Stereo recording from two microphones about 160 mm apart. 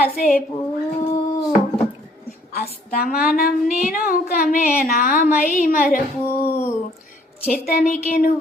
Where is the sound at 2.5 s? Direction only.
65° left (ahead or behind).